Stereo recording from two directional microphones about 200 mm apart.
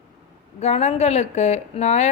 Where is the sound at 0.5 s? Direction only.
35° left (ahead or behind).